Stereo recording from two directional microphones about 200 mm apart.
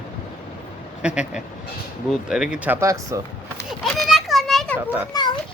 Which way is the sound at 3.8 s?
Centre (ahead or behind).